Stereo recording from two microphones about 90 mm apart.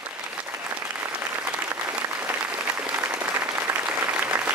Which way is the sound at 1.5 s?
15° right (ahead or behind).